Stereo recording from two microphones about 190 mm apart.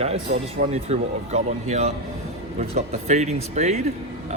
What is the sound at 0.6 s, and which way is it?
Speech, 35° right (ahead or behind).